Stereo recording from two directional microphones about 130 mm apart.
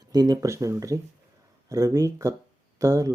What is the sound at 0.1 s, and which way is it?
Speech, 30° right (ahead or behind).